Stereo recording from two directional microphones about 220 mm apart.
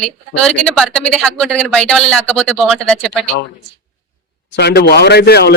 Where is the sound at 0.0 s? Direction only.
5° left (ahead or behind).